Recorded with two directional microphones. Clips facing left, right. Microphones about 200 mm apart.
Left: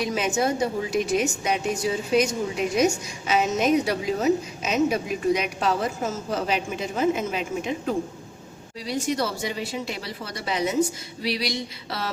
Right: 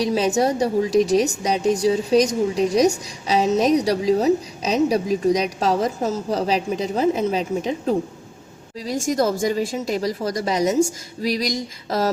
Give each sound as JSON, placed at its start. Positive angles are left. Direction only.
{"t": 0.0, "sound": "a woman's voice", "side_deg": -35}
{"t": 8.9, "sound": "a woman's voice", "side_deg": -45}